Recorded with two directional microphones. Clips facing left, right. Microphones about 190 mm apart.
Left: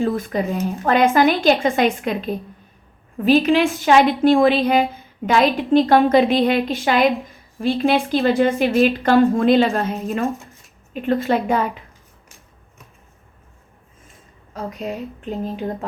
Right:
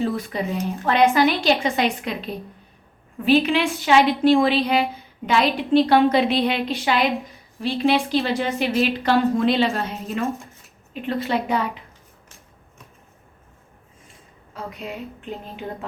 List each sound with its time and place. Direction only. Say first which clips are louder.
0.0 s a woman's voice: left 4 dB; 50° left (ahead or behind)
14.5 s speech: left 5 dB; 40° left (ahead or behind)